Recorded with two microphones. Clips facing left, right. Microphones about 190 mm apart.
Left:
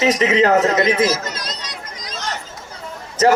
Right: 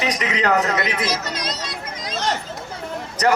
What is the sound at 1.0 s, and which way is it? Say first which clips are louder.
Speech: left 5 dB; 45° left (ahead or behind).